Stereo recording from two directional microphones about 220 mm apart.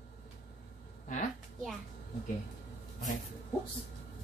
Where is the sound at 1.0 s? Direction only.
35° left (ahead or behind).